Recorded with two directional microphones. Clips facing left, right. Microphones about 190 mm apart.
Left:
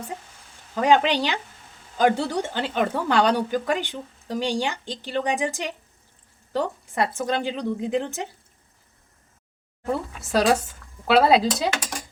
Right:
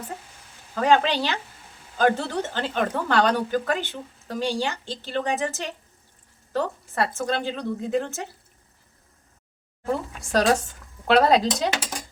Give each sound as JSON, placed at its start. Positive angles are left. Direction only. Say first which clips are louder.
{"t": 0.8, "sound": "a woman's voice", "louder": "left 1 dB", "side_deg": 15}
{"t": 9.8, "sound": "a woman's voice", "louder": "even", "side_deg": 5}